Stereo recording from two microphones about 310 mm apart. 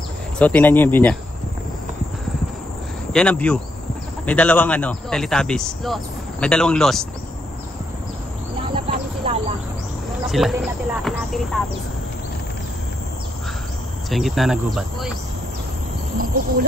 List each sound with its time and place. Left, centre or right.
0.4 s speech: centre
3.1 s speech: centre
8.7 s a sound: centre
10.2 s speech: centre
14.1 s speech: centre